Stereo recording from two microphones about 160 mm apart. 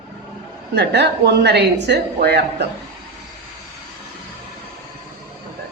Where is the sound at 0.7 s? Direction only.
90° right.